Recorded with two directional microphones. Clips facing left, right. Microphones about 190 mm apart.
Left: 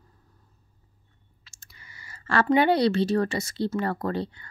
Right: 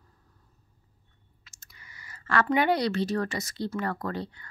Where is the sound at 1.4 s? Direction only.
30° left (ahead or behind).